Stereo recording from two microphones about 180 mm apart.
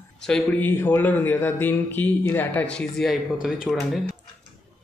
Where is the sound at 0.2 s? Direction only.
5° left (ahead or behind).